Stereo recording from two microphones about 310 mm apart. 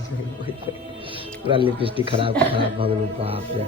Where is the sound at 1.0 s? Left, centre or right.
Centre.